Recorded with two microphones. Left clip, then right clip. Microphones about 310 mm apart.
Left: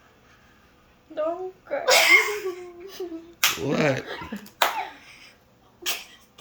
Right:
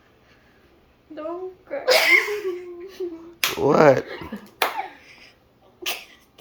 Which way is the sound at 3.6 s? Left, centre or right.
Centre.